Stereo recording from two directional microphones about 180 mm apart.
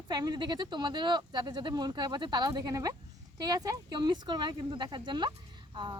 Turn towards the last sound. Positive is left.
turn(degrees=-25)  # may be behind; listen again after turning